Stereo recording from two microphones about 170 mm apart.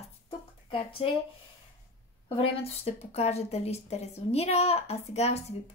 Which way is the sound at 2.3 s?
35° left (ahead or behind).